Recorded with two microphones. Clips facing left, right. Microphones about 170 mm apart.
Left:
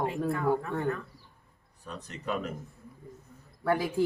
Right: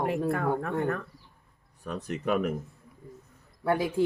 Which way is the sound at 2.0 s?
70° right (ahead or behind).